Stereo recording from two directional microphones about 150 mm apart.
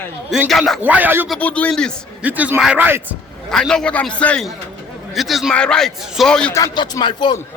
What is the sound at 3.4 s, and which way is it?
Speech, 5° left (ahead or behind).